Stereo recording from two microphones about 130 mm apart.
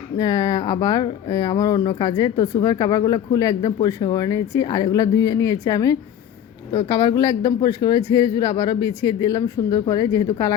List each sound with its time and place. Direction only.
0.2 s speech: 30° left (ahead or behind)